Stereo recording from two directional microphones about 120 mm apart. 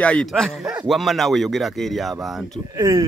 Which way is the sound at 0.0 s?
10° left (ahead or behind).